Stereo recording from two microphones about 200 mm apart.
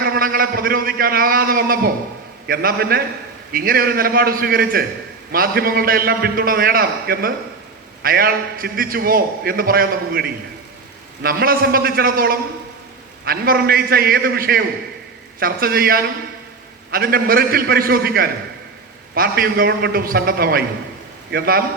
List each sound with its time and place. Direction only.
0.0 s a man's voice: 50° right (ahead or behind)